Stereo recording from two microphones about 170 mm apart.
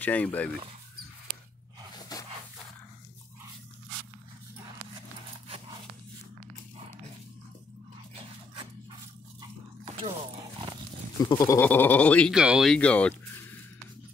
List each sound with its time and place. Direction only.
0.0 s speech: 10° left (ahead or behind)
2.1 s a sound: 20° left (ahead or behind)
11.2 s speech: 20° left (ahead or behind)
12.4 s speech: 5° right (ahead or behind)